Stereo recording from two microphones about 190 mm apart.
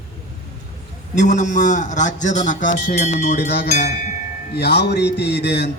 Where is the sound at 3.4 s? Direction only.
60° left (ahead or behind).